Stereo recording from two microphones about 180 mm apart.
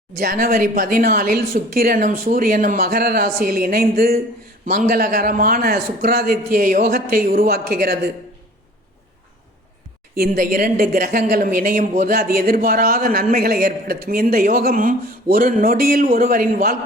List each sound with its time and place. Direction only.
0.2 s a woman's voice: 55° right (ahead or behind)
10.2 s speech: 50° right (ahead or behind)